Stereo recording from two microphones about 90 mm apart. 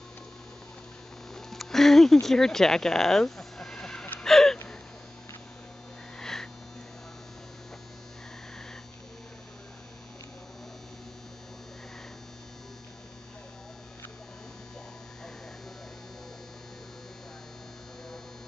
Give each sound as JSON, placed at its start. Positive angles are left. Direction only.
{"t": 1.3, "sound": "music", "side_deg": 5}
{"t": 2.2, "sound": "speech", "side_deg": 5}
{"t": 4.2, "sound": "gasp", "side_deg": 5}
{"t": 6.1, "sound": "sniff", "side_deg": 5}